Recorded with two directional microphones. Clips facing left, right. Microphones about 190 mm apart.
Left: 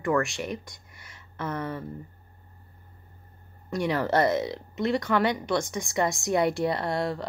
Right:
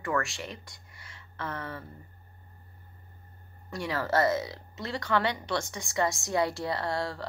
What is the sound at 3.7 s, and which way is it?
Speech, 20° left (ahead or behind).